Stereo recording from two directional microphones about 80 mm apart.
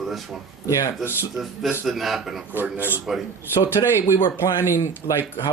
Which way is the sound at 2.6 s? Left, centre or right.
Right.